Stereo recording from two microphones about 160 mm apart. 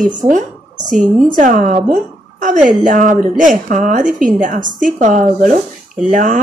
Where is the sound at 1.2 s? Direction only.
55° right (ahead or behind).